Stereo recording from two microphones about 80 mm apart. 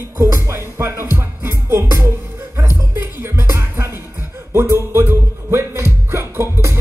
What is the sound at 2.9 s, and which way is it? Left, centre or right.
Music, right.